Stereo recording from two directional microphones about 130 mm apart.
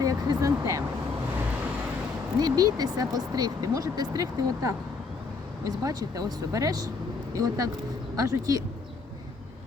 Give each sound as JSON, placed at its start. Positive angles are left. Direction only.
{"t": 0.0, "sound": "speech", "side_deg": -30}
{"t": 2.4, "sound": "speech", "side_deg": -30}